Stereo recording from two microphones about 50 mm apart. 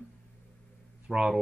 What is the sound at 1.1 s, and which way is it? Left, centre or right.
Speech, centre.